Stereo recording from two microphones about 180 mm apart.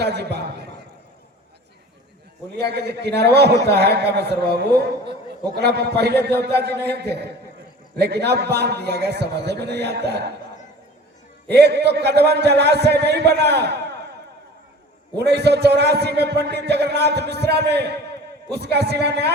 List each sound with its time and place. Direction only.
0.0 s a man's voice: 65° right (ahead or behind)
2.6 s a man's voice: 65° right (ahead or behind)
11.5 s a man's voice: 70° right (ahead or behind)
15.1 s a man's voice: 65° right (ahead or behind)